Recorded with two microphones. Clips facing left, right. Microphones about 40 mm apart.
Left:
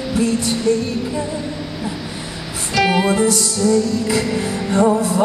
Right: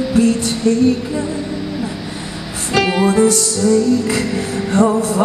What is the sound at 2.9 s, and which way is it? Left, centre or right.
Music, left.